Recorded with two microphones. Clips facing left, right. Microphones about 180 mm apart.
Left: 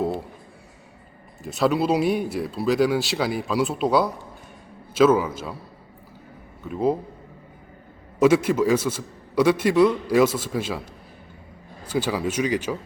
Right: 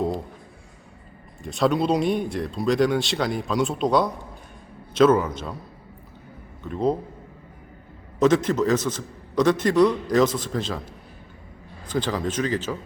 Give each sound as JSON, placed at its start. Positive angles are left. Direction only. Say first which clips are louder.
{"t": 0.0, "sound": "a sound", "louder": "even", "side_deg": 5}
{"t": 1.5, "sound": "a man's voice", "louder": "even", "side_deg": 5}
{"t": 6.6, "sound": "a man's voice", "louder": "left 1 dB", "side_deg": 5}
{"t": 8.2, "sound": "a man's voice", "louder": "left 1 dB", "side_deg": 10}
{"t": 11.9, "sound": "a man's voice", "louder": "left 1 dB", "side_deg": 10}